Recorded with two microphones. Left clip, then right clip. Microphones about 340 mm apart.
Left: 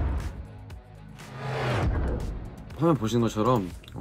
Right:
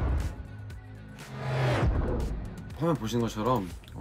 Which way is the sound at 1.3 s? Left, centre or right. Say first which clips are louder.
Left 1 dB; centre.